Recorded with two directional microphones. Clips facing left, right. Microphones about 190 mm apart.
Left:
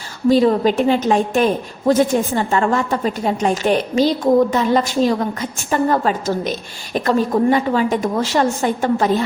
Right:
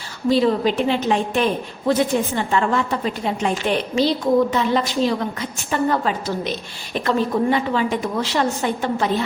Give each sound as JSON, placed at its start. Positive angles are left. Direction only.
{"t": 0.3, "sound": "a woman's voice", "side_deg": 45}